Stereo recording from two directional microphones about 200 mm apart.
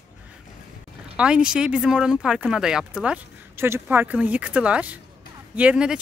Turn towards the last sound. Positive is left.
turn(degrees=-5)  # may be behind; listen again after turning